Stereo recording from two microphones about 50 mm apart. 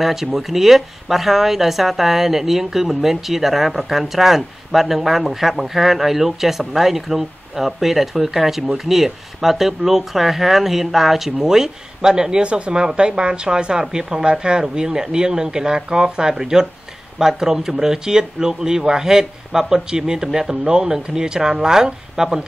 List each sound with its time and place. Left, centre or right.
0.0 s speech: centre